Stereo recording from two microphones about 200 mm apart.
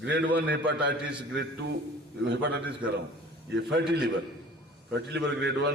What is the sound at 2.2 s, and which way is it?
Speech, 60° right (ahead or behind).